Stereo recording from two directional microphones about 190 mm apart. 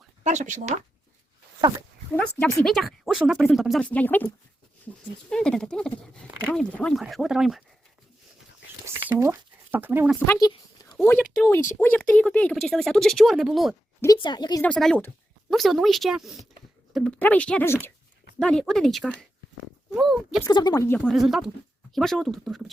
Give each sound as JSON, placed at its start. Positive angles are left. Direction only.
{"t": 0.3, "sound": "speech", "side_deg": -40}
{"t": 2.1, "sound": "speech", "side_deg": 5}
{"t": 5.3, "sound": "speech", "side_deg": 5}
{"t": 9.0, "sound": "speech", "side_deg": -15}
{"t": 10.2, "sound": "a sound", "side_deg": 20}
{"t": 11.8, "sound": "speech", "side_deg": 10}
{"t": 14.0, "sound": "a woman's voice", "side_deg": 20}
{"t": 14.6, "sound": "speech", "side_deg": 5}
{"t": 20.4, "sound": "speech", "side_deg": 20}